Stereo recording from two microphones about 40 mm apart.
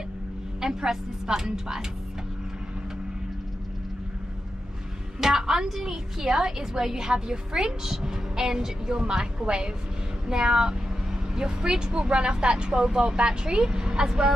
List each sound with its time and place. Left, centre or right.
0.6 s a woman's voice: centre
5.2 s a woman's voice: centre